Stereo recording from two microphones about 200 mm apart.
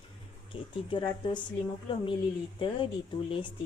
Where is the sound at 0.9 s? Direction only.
25° left (ahead or behind).